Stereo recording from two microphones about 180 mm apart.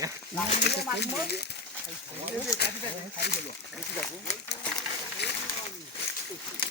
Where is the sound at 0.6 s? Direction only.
65° left (ahead or behind).